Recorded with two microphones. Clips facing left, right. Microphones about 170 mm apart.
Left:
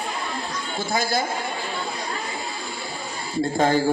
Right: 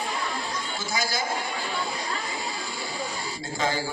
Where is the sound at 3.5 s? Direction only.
55° left (ahead or behind).